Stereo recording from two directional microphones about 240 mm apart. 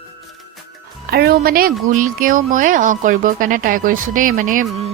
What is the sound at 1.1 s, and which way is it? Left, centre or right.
Speech, right.